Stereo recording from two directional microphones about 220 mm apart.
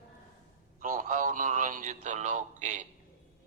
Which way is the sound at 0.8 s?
35° right (ahead or behind).